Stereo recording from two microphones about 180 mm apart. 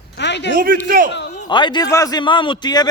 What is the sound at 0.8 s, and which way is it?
Speech, 50° right (ahead or behind).